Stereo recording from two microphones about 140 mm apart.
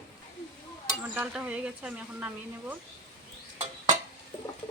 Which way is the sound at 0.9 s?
5° right (ahead or behind).